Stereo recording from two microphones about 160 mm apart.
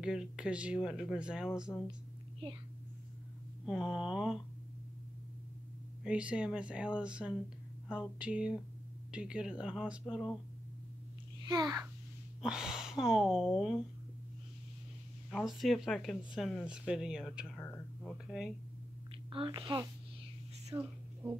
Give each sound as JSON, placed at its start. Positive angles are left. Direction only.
{"t": 0.0, "sound": "speech", "side_deg": -5}
{"t": 1.7, "sound": "speech", "side_deg": 10}
{"t": 3.6, "sound": "speech", "side_deg": 0}
{"t": 6.0, "sound": "speech", "side_deg": -5}
{"t": 11.4, "sound": "a child's voice", "side_deg": -25}
{"t": 12.4, "sound": "speech", "side_deg": -5}
{"t": 15.3, "sound": "speech", "side_deg": 0}
{"t": 19.3, "sound": "speech", "side_deg": -30}
{"t": 19.6, "sound": "a child's voice", "side_deg": -20}
{"t": 20.7, "sound": "a sound", "side_deg": -15}